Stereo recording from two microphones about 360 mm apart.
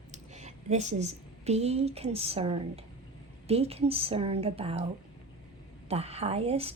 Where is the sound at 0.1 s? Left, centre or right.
Centre.